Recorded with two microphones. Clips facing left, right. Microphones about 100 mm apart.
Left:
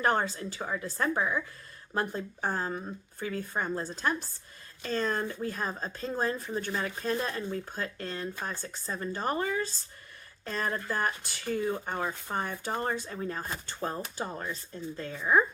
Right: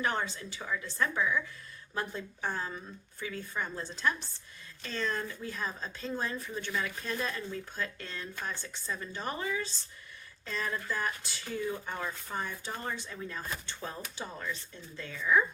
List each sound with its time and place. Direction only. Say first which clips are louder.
0.0 s speech: left 5 dB; 45° left (ahead or behind)
12.7 s speech: left 6 dB; 40° left (ahead or behind)